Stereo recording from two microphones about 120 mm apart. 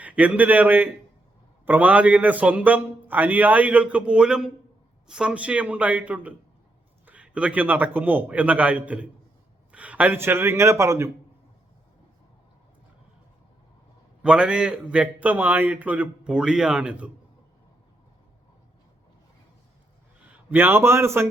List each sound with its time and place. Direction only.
0.0 s a man's voice: 10° right (ahead or behind)
14.2 s a man's voice: 10° right (ahead or behind)
20.3 s speech: 15° right (ahead or behind)